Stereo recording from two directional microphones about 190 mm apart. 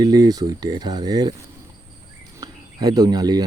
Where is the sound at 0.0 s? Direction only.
20° right (ahead or behind).